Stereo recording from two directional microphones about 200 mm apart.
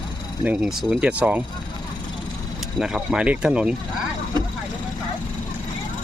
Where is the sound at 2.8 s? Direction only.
5° right (ahead or behind).